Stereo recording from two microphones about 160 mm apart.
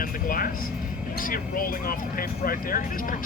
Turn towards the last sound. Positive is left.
turn(degrees=60)  # may be behind; listen again after turning